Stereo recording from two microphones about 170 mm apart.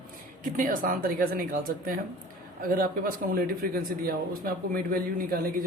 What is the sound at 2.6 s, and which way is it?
Speech, 60° right (ahead or behind).